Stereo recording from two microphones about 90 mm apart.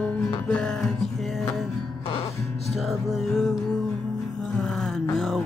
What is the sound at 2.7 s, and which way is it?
Music, centre (ahead or behind).